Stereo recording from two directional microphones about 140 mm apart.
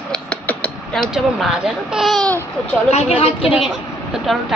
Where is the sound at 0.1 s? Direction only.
10° left (ahead or behind).